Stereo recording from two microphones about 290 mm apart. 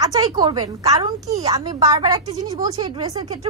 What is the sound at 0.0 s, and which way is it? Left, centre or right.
A woman's voice, centre.